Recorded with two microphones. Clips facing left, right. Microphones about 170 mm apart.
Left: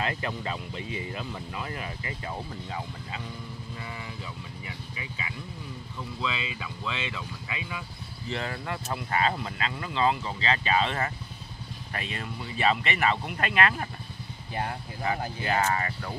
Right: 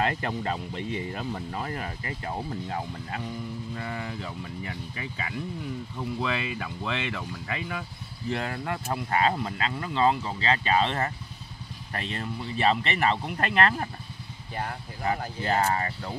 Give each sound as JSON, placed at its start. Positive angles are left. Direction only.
{"t": 0.0, "sound": "a sound", "side_deg": -45}
{"t": 0.4, "sound": "speech", "side_deg": -45}
{"t": 11.9, "sound": "speech", "side_deg": -35}
{"t": 15.0, "sound": "speech", "side_deg": -35}